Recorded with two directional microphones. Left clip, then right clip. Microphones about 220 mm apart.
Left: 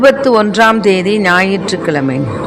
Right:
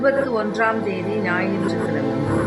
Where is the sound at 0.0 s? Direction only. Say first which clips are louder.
Left 11 dB; 45° left (ahead or behind).